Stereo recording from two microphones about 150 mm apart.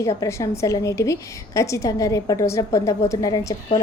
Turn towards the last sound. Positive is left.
turn(degrees=25)  # may be behind; listen again after turning